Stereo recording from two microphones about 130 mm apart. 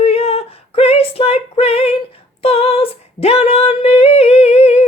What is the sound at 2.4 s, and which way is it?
Female singing, 45° left (ahead or behind).